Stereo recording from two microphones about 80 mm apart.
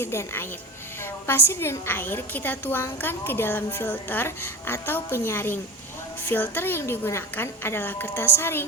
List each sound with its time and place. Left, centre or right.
0.0 s speech: left
1.5 s a woman's voice: left